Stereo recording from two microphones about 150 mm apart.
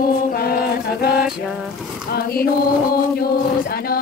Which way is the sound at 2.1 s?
85° left.